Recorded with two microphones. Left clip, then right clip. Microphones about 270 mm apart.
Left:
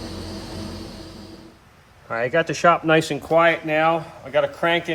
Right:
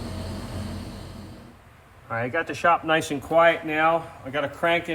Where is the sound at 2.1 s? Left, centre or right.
Left.